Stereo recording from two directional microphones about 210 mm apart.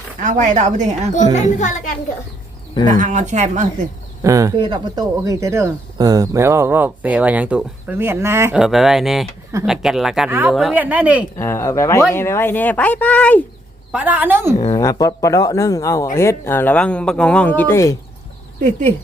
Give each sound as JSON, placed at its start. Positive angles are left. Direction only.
{"t": 0.2, "sound": "a woman's voice", "side_deg": -35}
{"t": 1.1, "sound": "speech", "side_deg": 35}
{"t": 2.8, "sound": "a woman's voice", "side_deg": -35}
{"t": 4.2, "sound": "speech", "side_deg": -15}
{"t": 11.3, "sound": "a man's voice", "side_deg": 10}
{"t": 13.9, "sound": "speech", "side_deg": -5}
{"t": 14.6, "sound": "a man's voice", "side_deg": 15}
{"t": 18.6, "sound": "a woman's voice", "side_deg": -30}